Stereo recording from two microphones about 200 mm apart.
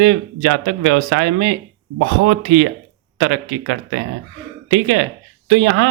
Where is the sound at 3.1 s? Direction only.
65° right (ahead or behind).